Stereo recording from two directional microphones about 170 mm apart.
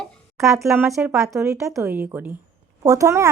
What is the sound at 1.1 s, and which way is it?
A woman's voice, 15° right (ahead or behind).